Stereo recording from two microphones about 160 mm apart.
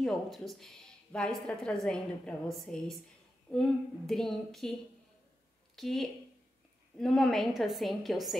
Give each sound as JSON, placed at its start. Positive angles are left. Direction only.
{"t": 0.0, "sound": "a woman's voice", "side_deg": 0}
{"t": 5.8, "sound": "a woman's voice", "side_deg": 0}